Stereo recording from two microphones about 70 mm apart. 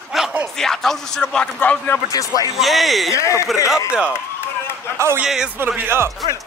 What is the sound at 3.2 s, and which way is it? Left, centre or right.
Speech, left.